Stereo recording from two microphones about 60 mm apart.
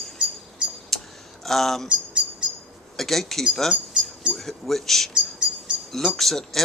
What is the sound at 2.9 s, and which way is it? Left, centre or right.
Speech, centre.